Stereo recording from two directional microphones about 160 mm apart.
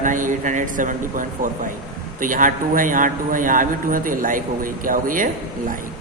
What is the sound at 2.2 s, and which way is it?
A man's voice, 55° right (ahead or behind).